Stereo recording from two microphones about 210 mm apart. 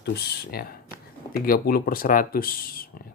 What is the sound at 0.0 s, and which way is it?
Speech, 50° left (ahead or behind).